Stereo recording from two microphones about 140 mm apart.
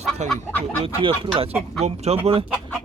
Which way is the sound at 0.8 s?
40° right (ahead or behind).